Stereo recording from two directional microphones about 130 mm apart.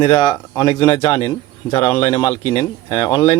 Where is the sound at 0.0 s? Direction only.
45° left (ahead or behind).